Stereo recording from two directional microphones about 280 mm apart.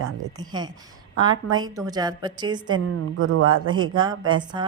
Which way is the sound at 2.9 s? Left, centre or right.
Right.